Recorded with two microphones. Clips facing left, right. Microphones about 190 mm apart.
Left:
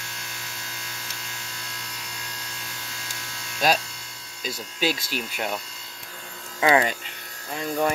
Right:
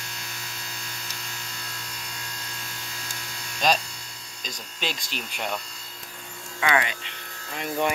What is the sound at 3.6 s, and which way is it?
Speech, 10° left (ahead or behind).